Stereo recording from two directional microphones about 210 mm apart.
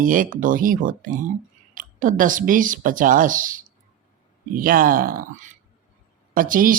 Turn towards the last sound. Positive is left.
turn(degrees=-40)  # may be behind; listen again after turning